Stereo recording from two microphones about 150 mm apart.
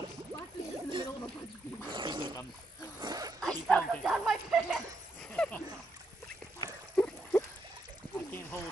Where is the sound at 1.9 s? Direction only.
30° right (ahead or behind).